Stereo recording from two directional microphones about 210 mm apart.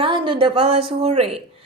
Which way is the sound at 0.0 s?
25° right (ahead or behind).